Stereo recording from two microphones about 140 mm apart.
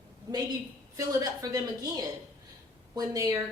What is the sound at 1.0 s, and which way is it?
A woman's voice, 25° right (ahead or behind).